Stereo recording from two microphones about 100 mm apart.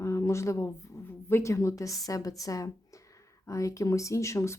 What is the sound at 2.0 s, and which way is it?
A woman's voice, 35° left (ahead or behind).